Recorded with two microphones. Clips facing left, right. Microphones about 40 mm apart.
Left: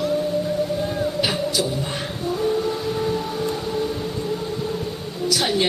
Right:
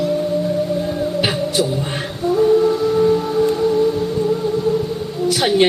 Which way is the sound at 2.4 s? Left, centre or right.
Centre.